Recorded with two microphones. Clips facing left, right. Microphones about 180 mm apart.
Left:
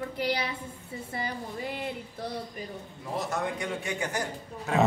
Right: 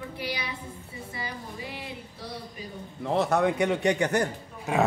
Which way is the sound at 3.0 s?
65° right (ahead or behind).